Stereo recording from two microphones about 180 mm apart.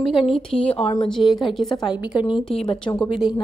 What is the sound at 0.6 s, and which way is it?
Speech, 35° left (ahead or behind).